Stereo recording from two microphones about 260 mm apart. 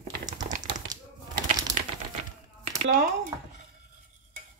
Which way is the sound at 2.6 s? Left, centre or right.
Right.